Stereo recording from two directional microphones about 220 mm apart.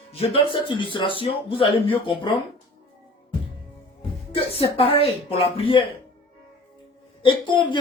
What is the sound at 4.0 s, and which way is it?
Speech, 25° left (ahead or behind).